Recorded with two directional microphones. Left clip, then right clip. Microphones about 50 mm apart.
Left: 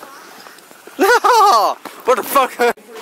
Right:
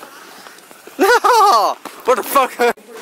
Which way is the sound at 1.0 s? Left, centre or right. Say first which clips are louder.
Even; centre.